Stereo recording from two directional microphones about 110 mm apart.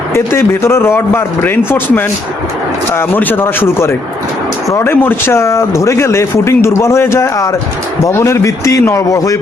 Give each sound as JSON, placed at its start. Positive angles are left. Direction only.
{"t": 0.1, "sound": "speech", "side_deg": 25}